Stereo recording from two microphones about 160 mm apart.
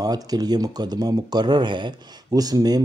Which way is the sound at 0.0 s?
25° right (ahead or behind).